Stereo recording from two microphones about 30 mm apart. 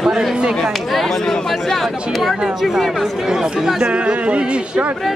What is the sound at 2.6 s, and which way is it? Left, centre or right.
Speech, centre.